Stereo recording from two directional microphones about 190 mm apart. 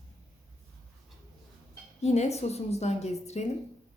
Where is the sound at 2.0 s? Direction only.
35° left (ahead or behind).